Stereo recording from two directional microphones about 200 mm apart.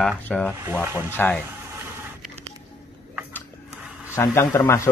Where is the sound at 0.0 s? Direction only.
5° left (ahead or behind).